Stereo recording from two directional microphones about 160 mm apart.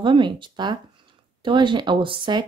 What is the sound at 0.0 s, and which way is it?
Speech, 30° right (ahead or behind).